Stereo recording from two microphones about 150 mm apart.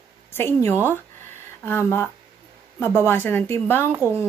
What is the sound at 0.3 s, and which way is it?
Speech, 15° left (ahead or behind).